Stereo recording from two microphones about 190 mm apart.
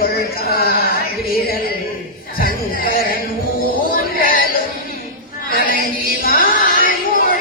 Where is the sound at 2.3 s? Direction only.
50° left (ahead or behind).